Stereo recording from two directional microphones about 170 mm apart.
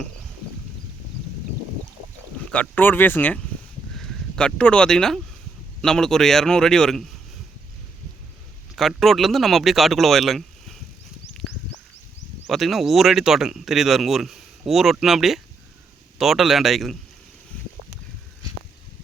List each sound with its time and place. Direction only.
2.4 s speech: 10° left (ahead or behind)
8.7 s speech: centre (ahead or behind)
12.5 s speech: centre (ahead or behind)